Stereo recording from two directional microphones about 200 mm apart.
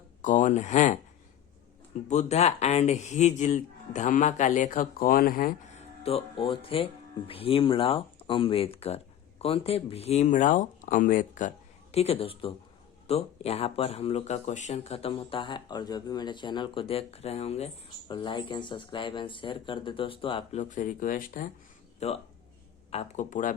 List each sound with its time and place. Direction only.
0.2 s speech: 40° left (ahead or behind)
2.0 s speech: 35° left (ahead or behind)
6.0 s speech: 30° left (ahead or behind)
22.0 s speech: 35° left (ahead or behind)